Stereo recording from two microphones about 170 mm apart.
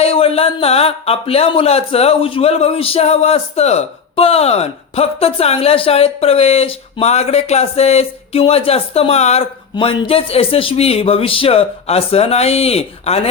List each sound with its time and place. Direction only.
0.0 s speech: 35° left (ahead or behind)